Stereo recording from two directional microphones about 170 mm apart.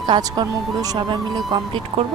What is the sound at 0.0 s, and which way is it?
A woman's voice, 25° right (ahead or behind).